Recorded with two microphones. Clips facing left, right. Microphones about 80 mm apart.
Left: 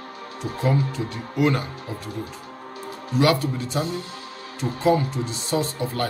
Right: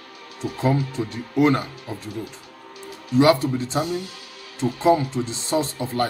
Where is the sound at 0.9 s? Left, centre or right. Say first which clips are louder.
Right 3 dB; right.